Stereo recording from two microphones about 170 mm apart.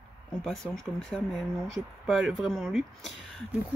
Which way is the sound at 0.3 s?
Centre (ahead or behind).